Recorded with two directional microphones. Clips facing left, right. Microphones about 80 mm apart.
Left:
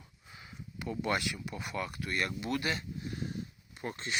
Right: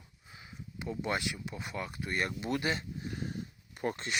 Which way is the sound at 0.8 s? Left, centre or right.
Centre.